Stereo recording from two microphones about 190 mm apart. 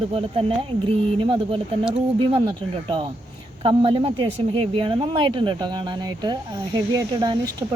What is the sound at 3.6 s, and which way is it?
Speech, 30° right (ahead or behind).